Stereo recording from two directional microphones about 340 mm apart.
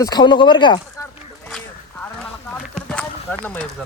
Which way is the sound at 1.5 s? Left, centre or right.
Centre.